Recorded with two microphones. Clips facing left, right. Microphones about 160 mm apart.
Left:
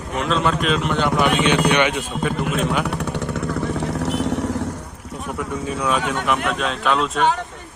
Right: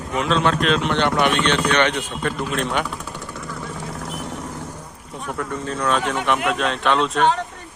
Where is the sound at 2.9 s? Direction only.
70° left (ahead or behind).